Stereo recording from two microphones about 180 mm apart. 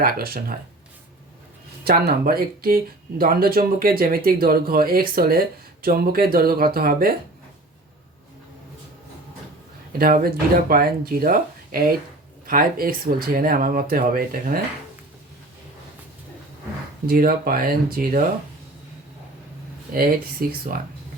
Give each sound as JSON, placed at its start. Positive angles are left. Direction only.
{"t": 0.0, "sound": "speech", "side_deg": -55}
{"t": 1.8, "sound": "speech", "side_deg": -60}
{"t": 10.0, "sound": "speech", "side_deg": -55}
{"t": 17.1, "sound": "speech", "side_deg": -55}
{"t": 19.9, "sound": "speech", "side_deg": -55}